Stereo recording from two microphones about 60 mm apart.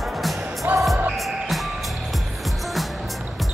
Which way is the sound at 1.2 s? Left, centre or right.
Centre.